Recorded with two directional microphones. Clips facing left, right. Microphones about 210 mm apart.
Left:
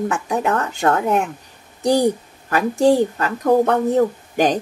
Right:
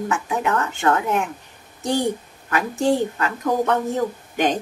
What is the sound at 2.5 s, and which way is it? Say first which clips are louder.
Speech: left 5 dB; 35° left (ahead or behind).